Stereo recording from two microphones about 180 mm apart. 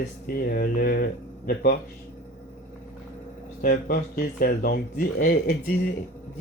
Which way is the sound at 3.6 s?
55° left (ahead or behind).